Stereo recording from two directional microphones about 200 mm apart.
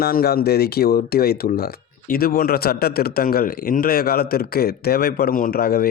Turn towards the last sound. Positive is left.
turn(degrees=50)  # may be behind; listen again after turning